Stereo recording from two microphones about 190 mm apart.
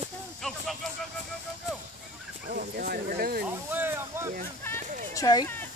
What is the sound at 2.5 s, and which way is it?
Speech, 50° right (ahead or behind).